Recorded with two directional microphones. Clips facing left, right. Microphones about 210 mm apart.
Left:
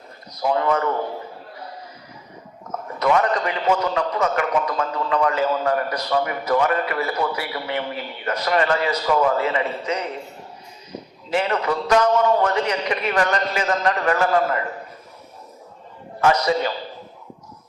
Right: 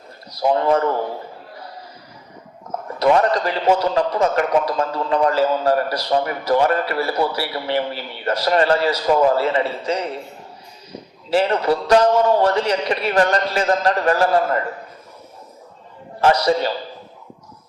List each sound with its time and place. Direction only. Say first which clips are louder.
0.4 s a man's voice: right 4 dB; 30° right (ahead or behind)
3.0 s a man's voice: right 3 dB; 35° right (ahead or behind)
11.3 s a man's voice: right 4 dB; 30° right (ahead or behind)
16.2 s a man's voice: right 2 dB; 35° right (ahead or behind)